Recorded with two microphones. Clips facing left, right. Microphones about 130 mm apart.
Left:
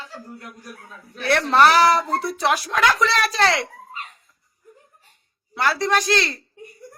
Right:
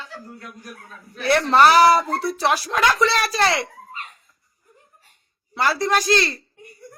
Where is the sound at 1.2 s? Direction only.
10° right (ahead or behind).